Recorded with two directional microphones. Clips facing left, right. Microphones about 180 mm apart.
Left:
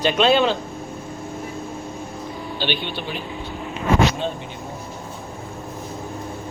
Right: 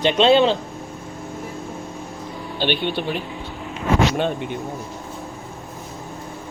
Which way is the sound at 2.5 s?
55° right (ahead or behind).